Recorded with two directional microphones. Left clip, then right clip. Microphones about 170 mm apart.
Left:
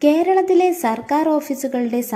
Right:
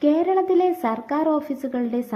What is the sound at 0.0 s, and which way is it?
A woman's voice, 35° left (ahead or behind).